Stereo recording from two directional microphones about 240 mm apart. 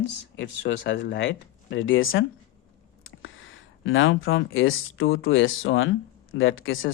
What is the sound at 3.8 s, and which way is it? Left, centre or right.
Speech, left.